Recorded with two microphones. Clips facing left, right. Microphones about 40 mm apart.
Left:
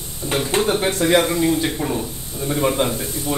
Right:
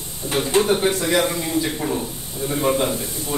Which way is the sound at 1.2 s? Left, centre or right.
Centre.